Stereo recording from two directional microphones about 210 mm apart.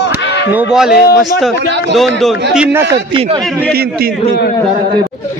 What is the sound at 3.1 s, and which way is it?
Speech, 25° right (ahead or behind).